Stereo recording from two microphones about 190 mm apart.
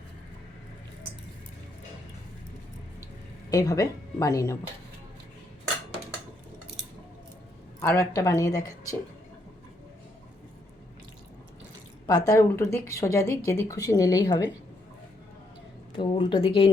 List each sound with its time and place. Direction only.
3.5 s speech: 20° left (ahead or behind)
7.8 s speech: 15° left (ahead or behind)
12.0 s speech: 20° left (ahead or behind)
16.0 s speech: 25° left (ahead or behind)